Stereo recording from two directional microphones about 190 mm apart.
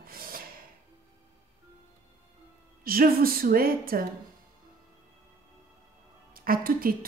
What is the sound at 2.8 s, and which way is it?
A woman's voice, 50° right (ahead or behind).